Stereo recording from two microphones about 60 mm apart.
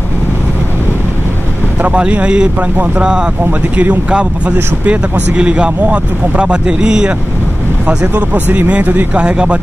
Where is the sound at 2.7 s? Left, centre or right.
Right.